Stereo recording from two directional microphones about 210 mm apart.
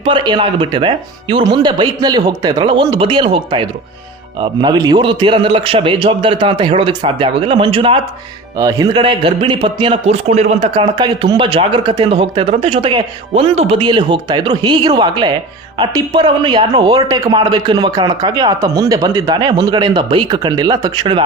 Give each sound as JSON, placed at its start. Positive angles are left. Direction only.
{"t": 0.0, "sound": "a man's voice", "side_deg": -20}